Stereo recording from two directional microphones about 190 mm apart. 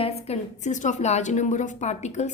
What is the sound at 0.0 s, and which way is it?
A woman's voice, 35° left (ahead or behind).